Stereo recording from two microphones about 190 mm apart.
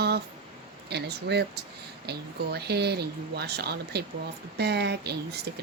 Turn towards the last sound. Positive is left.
turn(degrees=-60)  # may be behind; listen again after turning